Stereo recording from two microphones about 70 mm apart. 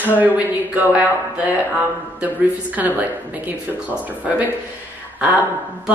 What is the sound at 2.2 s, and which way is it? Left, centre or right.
A woman's voice, right.